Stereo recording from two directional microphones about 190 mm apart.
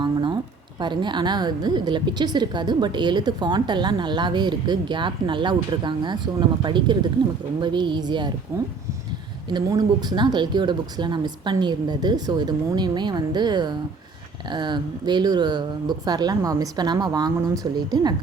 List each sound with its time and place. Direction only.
0.0 s a sound: 25° right (ahead or behind)
0.8 s a woman's voice: 25° right (ahead or behind)
9.5 s a woman's voice: 20° right (ahead or behind)